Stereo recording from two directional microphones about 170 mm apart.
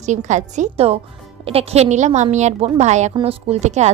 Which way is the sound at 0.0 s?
45° right (ahead or behind).